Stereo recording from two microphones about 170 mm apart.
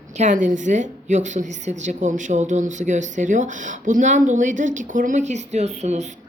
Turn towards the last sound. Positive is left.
turn(degrees=-40)  # may be behind; listen again after turning